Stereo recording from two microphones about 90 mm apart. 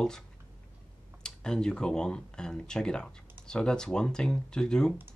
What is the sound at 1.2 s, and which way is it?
Speech, 10° left (ahead or behind).